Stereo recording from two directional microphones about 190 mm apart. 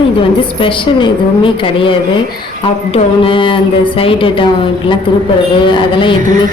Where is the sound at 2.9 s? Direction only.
30° left (ahead or behind).